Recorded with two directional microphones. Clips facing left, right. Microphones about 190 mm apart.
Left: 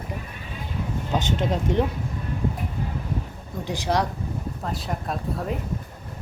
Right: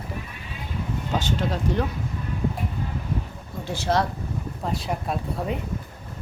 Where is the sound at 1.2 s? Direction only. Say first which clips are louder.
Left 1 dB; 20° left (ahead or behind).